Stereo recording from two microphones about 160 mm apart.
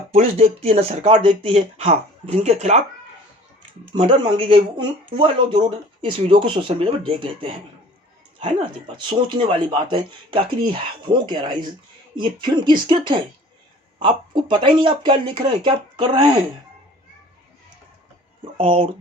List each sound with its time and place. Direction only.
0.1 s speech: 40° right (ahead or behind)
3.9 s speech: 30° right (ahead or behind)
18.5 s speech: 35° right (ahead or behind)